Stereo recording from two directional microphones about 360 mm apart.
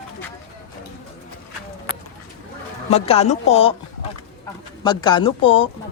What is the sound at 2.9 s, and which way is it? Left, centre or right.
Speech, centre.